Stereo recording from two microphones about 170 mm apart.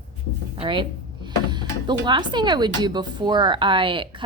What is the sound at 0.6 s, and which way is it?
A woman's voice, 30° right (ahead or behind).